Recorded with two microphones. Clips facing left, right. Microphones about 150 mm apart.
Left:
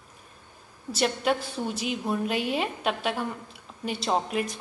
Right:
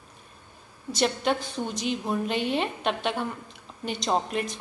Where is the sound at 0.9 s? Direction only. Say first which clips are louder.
Even; 5° left (ahead or behind).